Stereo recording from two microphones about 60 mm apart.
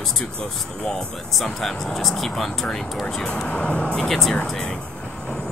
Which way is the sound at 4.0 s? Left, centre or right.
Centre.